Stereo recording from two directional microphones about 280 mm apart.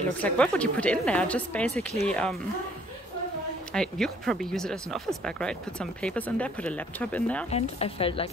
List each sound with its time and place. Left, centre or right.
0.2 s speech: centre
3.7 s speech: centre
7.5 s speech: left